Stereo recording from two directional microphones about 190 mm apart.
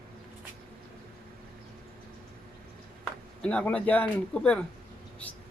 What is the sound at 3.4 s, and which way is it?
A man's voice, 5° left (ahead or behind).